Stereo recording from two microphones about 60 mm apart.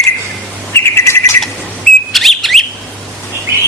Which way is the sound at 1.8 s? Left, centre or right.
Centre.